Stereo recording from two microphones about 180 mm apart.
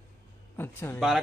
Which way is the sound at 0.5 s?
10° left (ahead or behind).